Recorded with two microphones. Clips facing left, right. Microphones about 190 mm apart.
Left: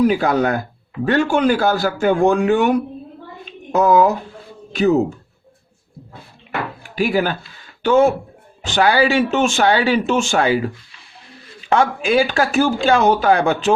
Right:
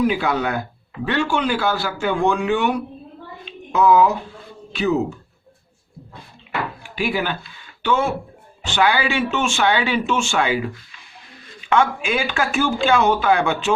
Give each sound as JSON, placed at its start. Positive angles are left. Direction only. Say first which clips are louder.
{"t": 0.0, "sound": "a man's voice", "louder": "left 4 dB", "side_deg": 40}
{"t": 3.4, "sound": "a sound", "louder": "left 1 dB", "side_deg": 45}
{"t": 4.7, "sound": "speech", "louder": "left 5 dB", "side_deg": 45}
{"t": 6.5, "sound": "a sound", "louder": "left 1 dB", "side_deg": 40}
{"t": 7.8, "sound": "speech", "louder": "left 7 dB", "side_deg": 40}
{"t": 11.7, "sound": "speech", "louder": "left 3 dB", "side_deg": 35}